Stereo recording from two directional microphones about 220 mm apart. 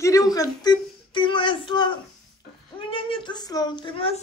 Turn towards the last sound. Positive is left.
turn(degrees=25)  # may be behind; listen again after turning